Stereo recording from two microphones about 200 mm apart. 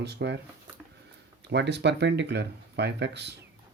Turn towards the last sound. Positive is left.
turn(degrees=-60)  # may be behind; listen again after turning